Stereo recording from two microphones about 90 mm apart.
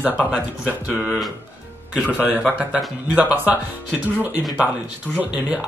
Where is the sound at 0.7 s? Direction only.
15° right (ahead or behind).